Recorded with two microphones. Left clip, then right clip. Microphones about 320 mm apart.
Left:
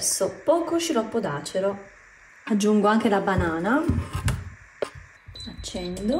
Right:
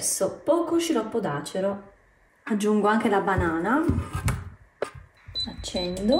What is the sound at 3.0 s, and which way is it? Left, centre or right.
Speech, left.